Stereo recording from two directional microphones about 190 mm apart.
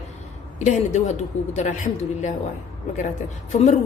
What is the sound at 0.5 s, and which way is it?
A woman's voice, 40° left (ahead or behind).